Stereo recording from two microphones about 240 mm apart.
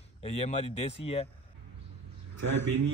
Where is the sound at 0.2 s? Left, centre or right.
Left.